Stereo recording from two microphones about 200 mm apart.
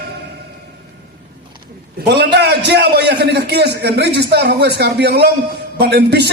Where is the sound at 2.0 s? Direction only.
55° right (ahead or behind).